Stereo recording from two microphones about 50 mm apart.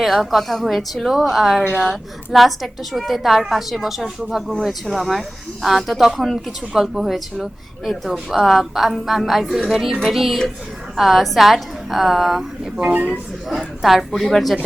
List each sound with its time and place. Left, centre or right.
0.0 s a woman's voice: centre
12.9 s speech: right
13.5 s a woman's voice: centre